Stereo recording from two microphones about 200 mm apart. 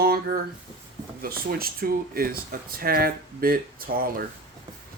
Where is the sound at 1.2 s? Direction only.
50° right (ahead or behind).